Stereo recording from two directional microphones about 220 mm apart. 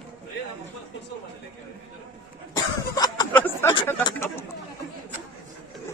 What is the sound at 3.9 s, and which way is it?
Speech, 10° left (ahead or behind).